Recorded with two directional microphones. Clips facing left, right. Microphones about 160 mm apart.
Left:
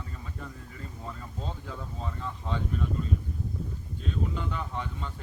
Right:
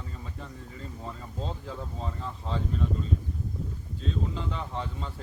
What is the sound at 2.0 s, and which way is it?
Speech, 30° right (ahead or behind).